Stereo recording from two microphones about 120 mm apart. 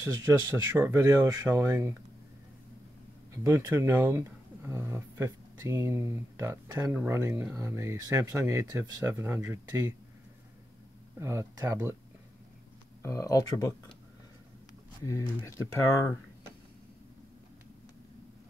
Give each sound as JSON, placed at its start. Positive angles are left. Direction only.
{"t": 0.3, "sound": "speech", "side_deg": -20}
{"t": 3.4, "sound": "speech", "side_deg": -20}
{"t": 11.1, "sound": "speech", "side_deg": -25}
{"t": 13.0, "sound": "speech", "side_deg": 25}
{"t": 15.0, "sound": "speech", "side_deg": 25}